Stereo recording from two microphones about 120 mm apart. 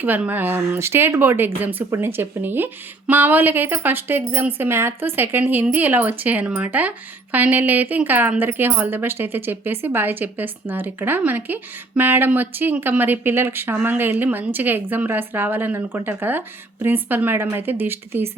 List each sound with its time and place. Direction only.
0.0 s a woman's voice: 15° right (ahead or behind)